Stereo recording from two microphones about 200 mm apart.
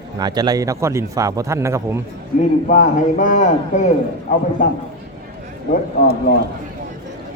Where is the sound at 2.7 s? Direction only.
40° left (ahead or behind).